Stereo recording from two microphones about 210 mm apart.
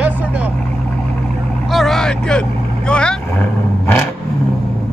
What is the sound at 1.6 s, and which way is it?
Vehicle, centre (ahead or behind).